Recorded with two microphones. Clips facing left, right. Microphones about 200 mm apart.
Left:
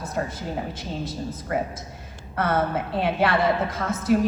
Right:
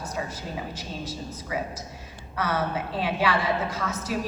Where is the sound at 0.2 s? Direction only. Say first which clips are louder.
Left 5 dB; 55° left (ahead or behind).